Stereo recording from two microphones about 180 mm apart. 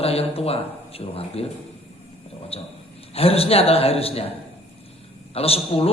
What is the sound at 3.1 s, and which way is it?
A man's voice, 35° left (ahead or behind).